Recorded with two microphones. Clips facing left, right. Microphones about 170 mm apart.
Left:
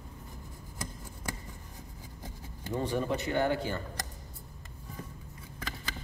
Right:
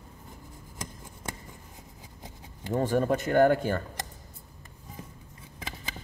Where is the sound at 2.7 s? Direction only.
45° right (ahead or behind).